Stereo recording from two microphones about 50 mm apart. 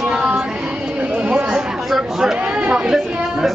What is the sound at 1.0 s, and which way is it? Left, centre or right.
Chatter, right.